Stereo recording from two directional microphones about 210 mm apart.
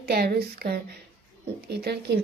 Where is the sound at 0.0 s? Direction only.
45° right (ahead or behind).